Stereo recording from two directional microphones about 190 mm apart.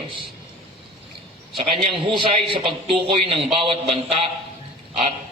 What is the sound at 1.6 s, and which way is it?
A man's voice, 30° right (ahead or behind).